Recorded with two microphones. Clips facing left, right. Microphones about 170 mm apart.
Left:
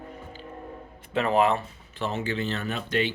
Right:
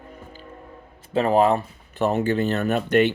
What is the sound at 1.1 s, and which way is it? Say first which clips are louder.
Speech: right 4 dB; 35° right (ahead or behind).